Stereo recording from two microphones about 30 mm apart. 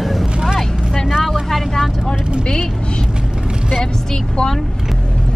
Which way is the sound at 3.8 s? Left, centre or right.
Left.